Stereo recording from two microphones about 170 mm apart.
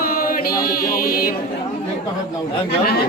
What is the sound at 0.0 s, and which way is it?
Chant, 60° left (ahead or behind).